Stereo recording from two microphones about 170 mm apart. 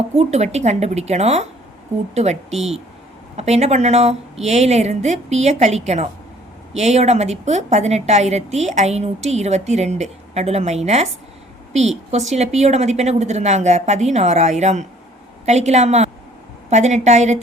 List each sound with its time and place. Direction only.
0.2 s a woman's voice: 40° right (ahead or behind)